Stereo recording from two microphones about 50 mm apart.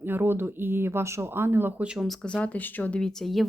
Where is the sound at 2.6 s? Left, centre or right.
Left.